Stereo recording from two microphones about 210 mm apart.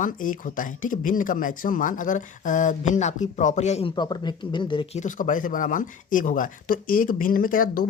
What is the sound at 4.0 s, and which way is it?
Speech, 20° left (ahead or behind).